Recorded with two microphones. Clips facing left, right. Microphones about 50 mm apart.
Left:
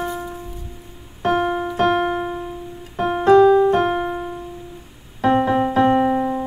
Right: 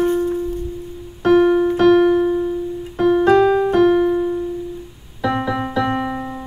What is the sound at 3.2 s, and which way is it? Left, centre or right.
Keyboard, right.